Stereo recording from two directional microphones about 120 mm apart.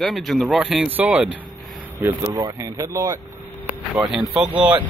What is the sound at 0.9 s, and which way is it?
Speech, 15° right (ahead or behind).